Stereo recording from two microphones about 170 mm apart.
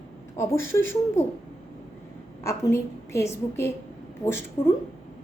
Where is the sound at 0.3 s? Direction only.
15° left (ahead or behind).